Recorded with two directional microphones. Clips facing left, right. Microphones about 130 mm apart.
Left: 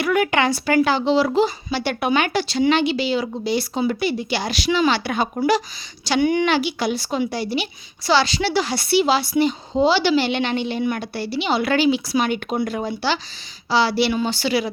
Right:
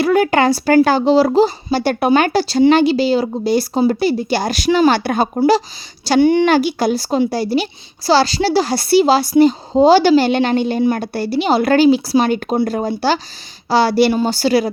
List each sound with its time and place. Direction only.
0.0 s a woman's voice: 35° right (ahead or behind)
6.5 s a woman's voice: 45° right (ahead or behind)